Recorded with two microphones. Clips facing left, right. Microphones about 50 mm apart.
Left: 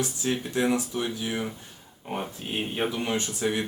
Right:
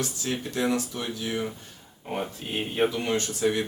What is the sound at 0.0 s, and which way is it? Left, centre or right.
Speech, centre.